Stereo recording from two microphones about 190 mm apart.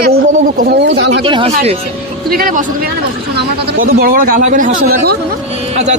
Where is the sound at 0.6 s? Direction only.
60° right (ahead or behind).